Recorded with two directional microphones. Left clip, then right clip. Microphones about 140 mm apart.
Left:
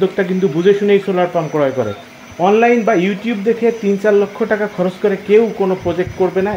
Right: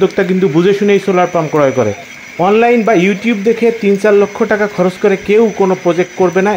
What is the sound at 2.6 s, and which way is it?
Speech, 25° right (ahead or behind).